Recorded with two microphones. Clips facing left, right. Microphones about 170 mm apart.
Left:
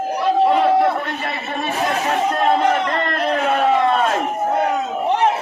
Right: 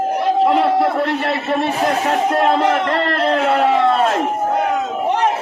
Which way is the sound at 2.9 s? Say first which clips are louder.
Right 3 dB; 75° right (ahead or behind).